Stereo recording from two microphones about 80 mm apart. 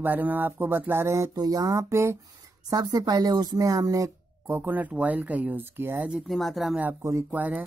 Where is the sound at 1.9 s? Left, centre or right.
Right.